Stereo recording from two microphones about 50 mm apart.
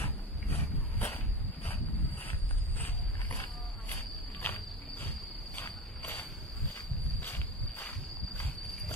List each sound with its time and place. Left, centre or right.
0.0 s wild animals: left
1.7 s a sound: left
3.9 s cricket: left
5.6 s walk: left
7.2 s walk: left